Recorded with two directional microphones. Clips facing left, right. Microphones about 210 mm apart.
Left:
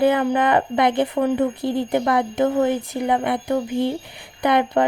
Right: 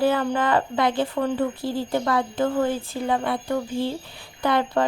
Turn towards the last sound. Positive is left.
turn(degrees=15)  # may be behind; listen again after turning